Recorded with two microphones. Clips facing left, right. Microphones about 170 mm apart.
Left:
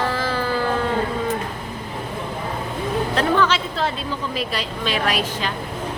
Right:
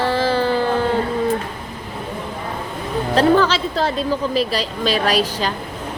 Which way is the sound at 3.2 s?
35° right (ahead or behind).